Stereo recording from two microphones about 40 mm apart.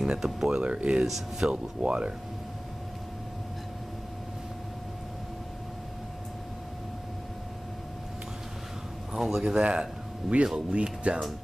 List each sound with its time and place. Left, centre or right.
0.0 s speech: centre
0.6 s speech: right
1.0 s speech: centre
1.5 s speech: right
9.1 s a man's voice: centre
9.4 s speech: centre
10.3 s speech: centre
10.7 s speech: right